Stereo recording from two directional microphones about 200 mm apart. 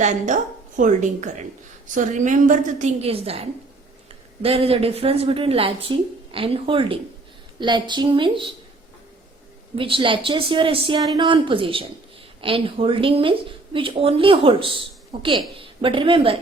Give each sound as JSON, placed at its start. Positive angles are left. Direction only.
{"t": 0.8, "sound": "a woman's voice", "side_deg": -35}
{"t": 4.4, "sound": "speech", "side_deg": -30}
{"t": 9.7, "sound": "a woman's voice", "side_deg": -25}